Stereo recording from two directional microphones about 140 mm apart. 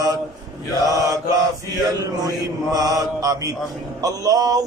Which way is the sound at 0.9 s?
25° right (ahead or behind).